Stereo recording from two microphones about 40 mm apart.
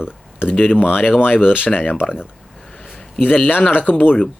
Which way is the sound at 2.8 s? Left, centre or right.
Centre.